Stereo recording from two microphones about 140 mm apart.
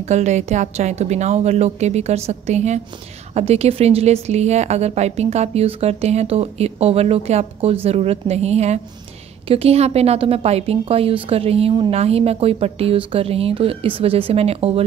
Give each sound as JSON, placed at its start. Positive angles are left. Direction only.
{"t": 0.0, "sound": "a woman's voice", "side_deg": -55}